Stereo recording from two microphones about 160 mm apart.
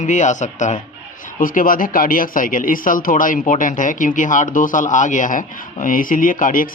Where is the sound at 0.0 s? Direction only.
50° left (ahead or behind).